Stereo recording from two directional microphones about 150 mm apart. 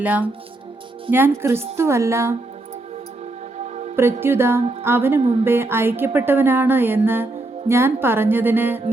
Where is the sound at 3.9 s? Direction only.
15° right (ahead or behind).